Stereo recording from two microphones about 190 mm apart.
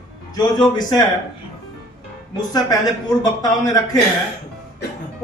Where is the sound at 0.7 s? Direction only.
20° left (ahead or behind).